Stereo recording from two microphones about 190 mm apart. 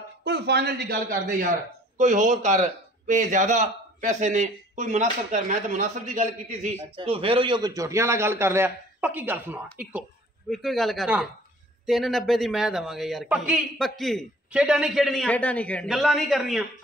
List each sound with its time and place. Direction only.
0.2 s a man's voice: 60° right (ahead or behind); by 6.7 s 40° right (ahead or behind)
7.0 s a man's voice: 30° right (ahead or behind); by 9.6 s 10° right (ahead or behind)
10.5 s a man's voice: centre (ahead or behind)